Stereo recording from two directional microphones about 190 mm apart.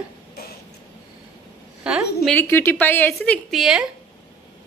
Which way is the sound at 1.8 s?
5° right (ahead or behind).